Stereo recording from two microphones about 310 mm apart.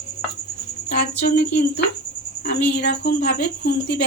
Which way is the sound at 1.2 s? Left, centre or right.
Left.